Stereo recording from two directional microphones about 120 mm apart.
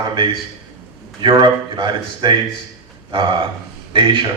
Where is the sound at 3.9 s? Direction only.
45° right (ahead or behind).